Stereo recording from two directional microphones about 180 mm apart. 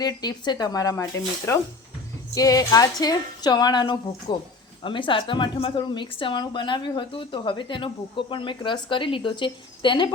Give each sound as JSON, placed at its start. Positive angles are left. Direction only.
{"t": 0.0, "sound": "a woman's voice", "side_deg": 20}